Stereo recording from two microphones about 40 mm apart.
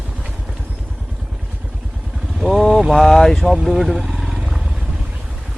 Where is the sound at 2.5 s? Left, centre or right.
Centre.